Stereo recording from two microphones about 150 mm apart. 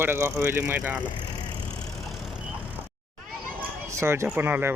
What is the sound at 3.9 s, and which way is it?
Speech, 20° right (ahead or behind).